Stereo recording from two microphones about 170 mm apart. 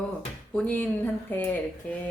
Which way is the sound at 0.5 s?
10° left (ahead or behind).